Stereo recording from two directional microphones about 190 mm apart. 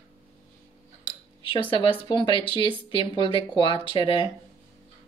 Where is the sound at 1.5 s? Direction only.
25° left (ahead or behind).